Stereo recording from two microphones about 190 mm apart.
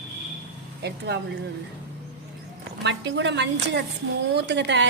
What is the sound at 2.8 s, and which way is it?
A woman's voice, 70° right (ahead or behind).